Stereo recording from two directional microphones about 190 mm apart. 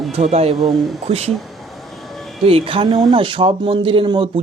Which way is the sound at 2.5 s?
30° right (ahead or behind).